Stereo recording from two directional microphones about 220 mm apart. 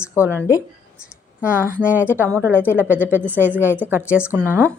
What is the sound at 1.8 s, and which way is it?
A woman's voice, 5° right (ahead or behind).